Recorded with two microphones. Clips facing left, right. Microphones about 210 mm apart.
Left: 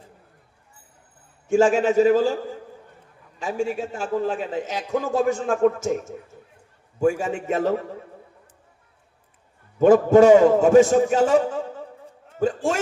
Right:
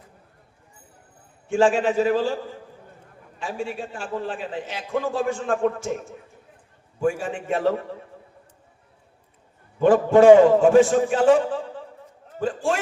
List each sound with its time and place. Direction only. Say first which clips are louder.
1.5 s a man's voice: left 2 dB; 45° left (ahead or behind)
3.4 s a man's voice: left 4 dB; 40° left (ahead or behind)
9.7 s a man's voice: left 3 dB; 45° left (ahead or behind)
12.4 s a man's voice: left 2 dB; 45° left (ahead or behind)